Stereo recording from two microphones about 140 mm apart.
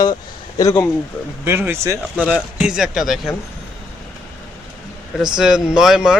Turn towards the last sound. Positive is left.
turn(degrees=-5)  # may be behind; listen again after turning